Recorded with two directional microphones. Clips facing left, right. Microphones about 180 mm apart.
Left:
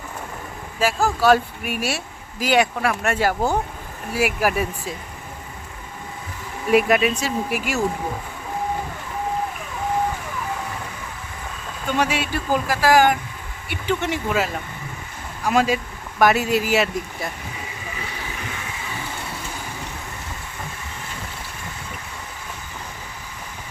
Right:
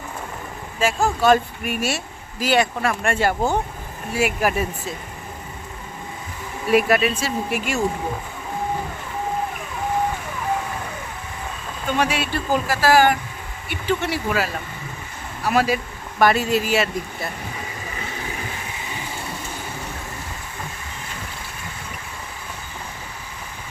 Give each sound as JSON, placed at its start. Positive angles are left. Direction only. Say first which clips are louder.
{"t": 0.8, "sound": "speech", "louder": "even", "side_deg": 5}
{"t": 6.7, "sound": "speech", "louder": "left 1 dB", "side_deg": 15}
{"t": 12.1, "sound": "speech", "louder": "even", "side_deg": 15}